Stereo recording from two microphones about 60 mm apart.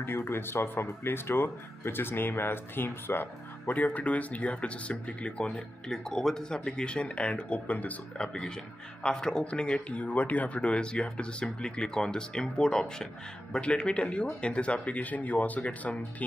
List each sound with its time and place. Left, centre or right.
0.0 s speech: left
3.7 s speech: left
8.3 s a man's voice: centre